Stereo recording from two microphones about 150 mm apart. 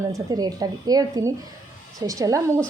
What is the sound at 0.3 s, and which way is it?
Speech, 25° right (ahead or behind).